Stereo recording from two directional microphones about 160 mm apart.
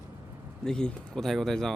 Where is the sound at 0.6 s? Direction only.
5° left (ahead or behind).